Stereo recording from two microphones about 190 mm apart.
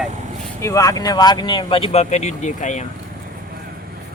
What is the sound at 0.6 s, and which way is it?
Speech, 15° left (ahead or behind).